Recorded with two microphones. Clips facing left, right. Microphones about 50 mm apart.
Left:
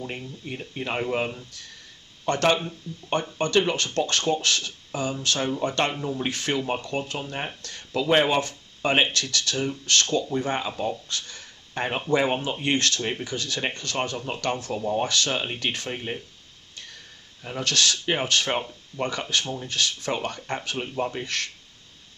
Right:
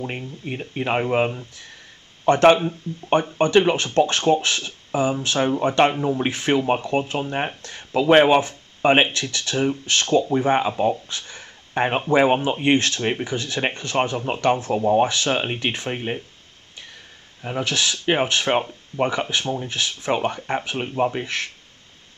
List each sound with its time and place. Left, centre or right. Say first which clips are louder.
0.0 s speech: right 4 dB; right
17.4 s speech: right 2 dB; centre